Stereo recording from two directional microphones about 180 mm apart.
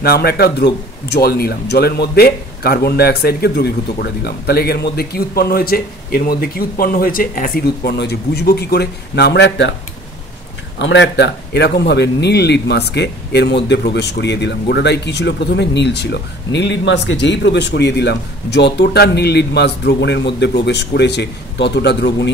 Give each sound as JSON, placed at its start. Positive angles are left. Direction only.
{"t": 0.0, "sound": "speech", "side_deg": 60}
{"t": 10.8, "sound": "a man's voice", "side_deg": 75}